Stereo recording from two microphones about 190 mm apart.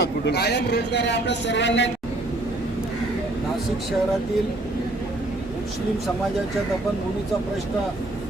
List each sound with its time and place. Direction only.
0.0 s a man's voice: 60° left (ahead or behind)